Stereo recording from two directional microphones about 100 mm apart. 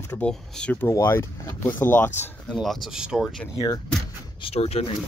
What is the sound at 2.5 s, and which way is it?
Speech, centre (ahead or behind).